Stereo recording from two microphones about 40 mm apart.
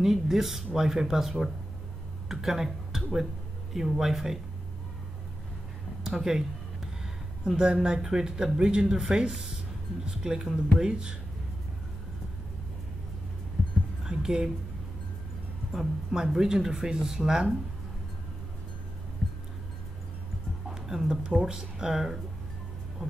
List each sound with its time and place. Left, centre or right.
0.0 s speech: centre
6.0 s speech: centre
7.4 s speech: right
14.0 s music: centre
15.7 s speech: centre
20.7 s speech: centre